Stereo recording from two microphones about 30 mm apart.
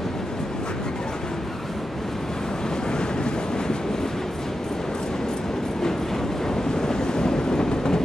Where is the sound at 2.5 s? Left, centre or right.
Left.